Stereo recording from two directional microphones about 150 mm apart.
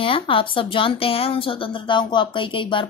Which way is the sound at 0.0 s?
35° left (ahead or behind).